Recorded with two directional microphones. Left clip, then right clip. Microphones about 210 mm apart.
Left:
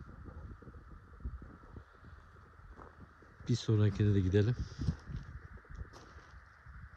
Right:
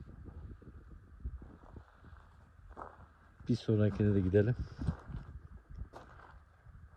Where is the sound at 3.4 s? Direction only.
10° left (ahead or behind).